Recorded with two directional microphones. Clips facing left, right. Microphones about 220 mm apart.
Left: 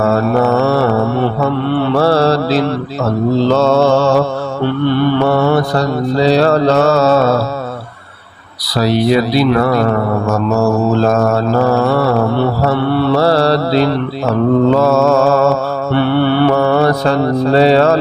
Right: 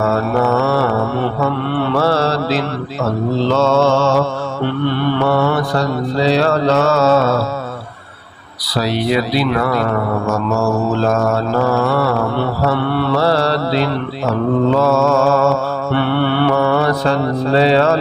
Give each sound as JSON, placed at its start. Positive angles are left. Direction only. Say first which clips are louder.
{"t": 0.4, "sound": "mantra", "louder": "left 3 dB", "side_deg": 40}
{"t": 2.0, "sound": "mantra", "louder": "left 5 dB", "side_deg": 35}
{"t": 8.8, "sound": "speech", "louder": "left 5 dB", "side_deg": 40}
{"t": 11.1, "sound": "mantra", "louder": "left 3 dB", "side_deg": 40}
{"t": 13.1, "sound": "mantra", "louder": "left 3 dB", "side_deg": 40}